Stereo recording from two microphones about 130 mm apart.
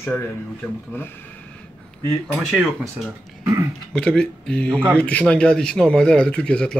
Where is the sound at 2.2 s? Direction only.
Centre (ahead or behind).